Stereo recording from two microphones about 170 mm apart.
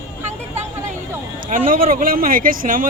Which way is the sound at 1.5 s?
55° right (ahead or behind).